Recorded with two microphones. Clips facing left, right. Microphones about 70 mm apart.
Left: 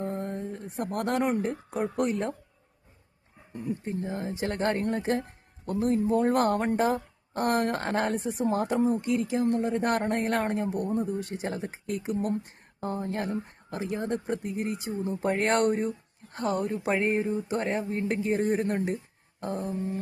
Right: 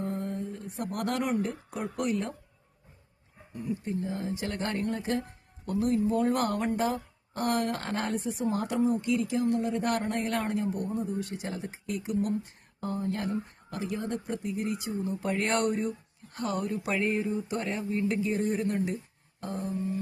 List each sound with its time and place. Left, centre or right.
0.0 s a woman's voice: left
3.5 s speech: left
3.8 s a woman's voice: left
12.8 s a woman's voice: left